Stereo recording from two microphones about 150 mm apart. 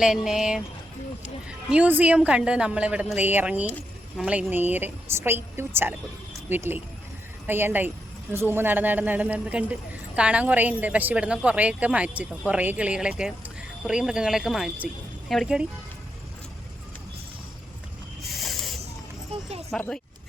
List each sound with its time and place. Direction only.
0.0 s a woman's voice: 5° right (ahead or behind)
18.2 s a sound: centre (ahead or behind)
19.3 s music: 40° right (ahead or behind)
19.7 s speech: centre (ahead or behind)